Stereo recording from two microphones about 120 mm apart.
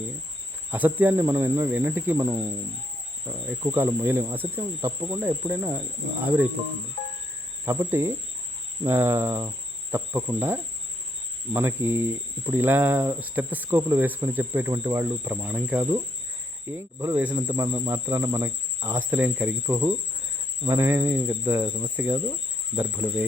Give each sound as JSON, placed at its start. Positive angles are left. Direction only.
{"t": 0.7, "sound": "speech", "side_deg": -15}
{"t": 7.6, "sound": "speech", "side_deg": -25}